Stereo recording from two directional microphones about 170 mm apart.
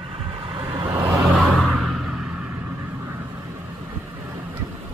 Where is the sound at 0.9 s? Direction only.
10° right (ahead or behind).